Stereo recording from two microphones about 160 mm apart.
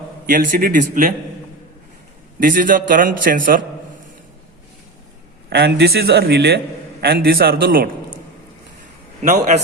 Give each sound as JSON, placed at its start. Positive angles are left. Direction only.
{"t": 0.3, "sound": "a man's voice", "side_deg": -60}
{"t": 2.4, "sound": "a man's voice", "side_deg": -60}
{"t": 5.5, "sound": "a man's voice", "side_deg": -90}
{"t": 7.0, "sound": "a man's voice", "side_deg": -70}